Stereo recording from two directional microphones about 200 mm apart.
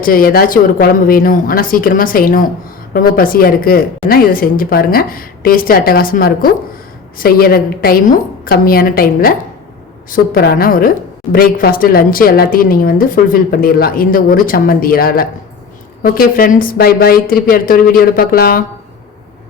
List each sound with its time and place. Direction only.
0.0 s a woman's voice: 45° left (ahead or behind)